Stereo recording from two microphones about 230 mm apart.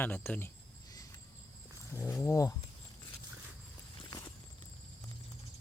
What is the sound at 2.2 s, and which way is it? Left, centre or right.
Speech, centre.